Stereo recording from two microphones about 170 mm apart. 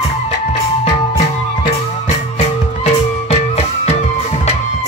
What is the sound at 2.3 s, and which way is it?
Music, 40° left (ahead or behind).